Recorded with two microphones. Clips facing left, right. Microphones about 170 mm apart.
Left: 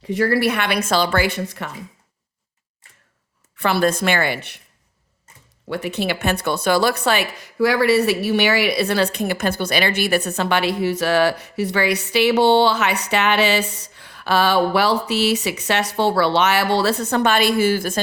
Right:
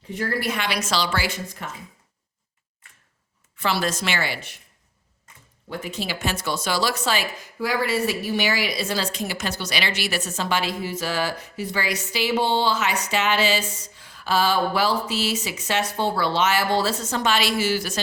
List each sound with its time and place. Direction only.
0.1 s a woman's voice: 75° left (ahead or behind)
3.6 s a woman's voice: 55° left (ahead or behind)
5.6 s a woman's voice: 70° left (ahead or behind); by 18.0 s 50° left (ahead or behind)